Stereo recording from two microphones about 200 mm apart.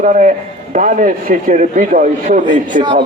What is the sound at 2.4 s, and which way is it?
Speech, 25° right (ahead or behind).